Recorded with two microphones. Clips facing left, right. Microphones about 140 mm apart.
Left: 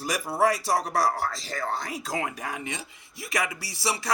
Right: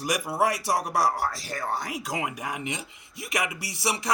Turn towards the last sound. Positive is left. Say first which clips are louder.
# right 1 dB
turn(degrees=-20)  # may be behind; listen again after turning